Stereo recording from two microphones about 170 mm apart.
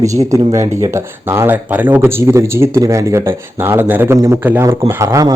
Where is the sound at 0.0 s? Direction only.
20° right (ahead or behind).